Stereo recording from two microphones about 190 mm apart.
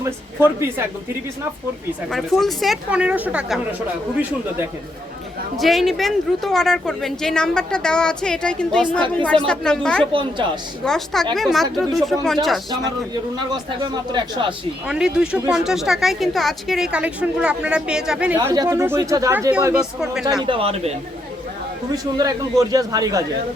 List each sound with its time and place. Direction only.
0.0 s speech: 10° right (ahead or behind)
2.0 s speech: centre (ahead or behind)
5.5 s speech: centre (ahead or behind)
10.1 s a man's voice: 25° right (ahead or behind)
10.8 s speech: centre (ahead or behind)
13.4 s a man's voice: 20° right (ahead or behind)
14.8 s speech: 5° right (ahead or behind)
18.3 s speech: 20° right (ahead or behind)
20.4 s a man's voice: 30° right (ahead or behind)
21.9 s a man's voice: 20° right (ahead or behind)